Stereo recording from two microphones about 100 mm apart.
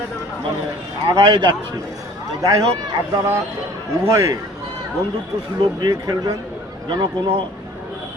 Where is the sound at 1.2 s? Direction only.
50° right (ahead or behind).